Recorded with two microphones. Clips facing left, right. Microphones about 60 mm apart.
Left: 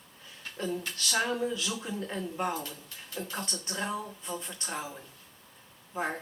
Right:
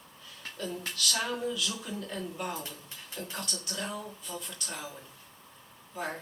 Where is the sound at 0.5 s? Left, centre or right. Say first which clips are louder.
Left 3 dB; left.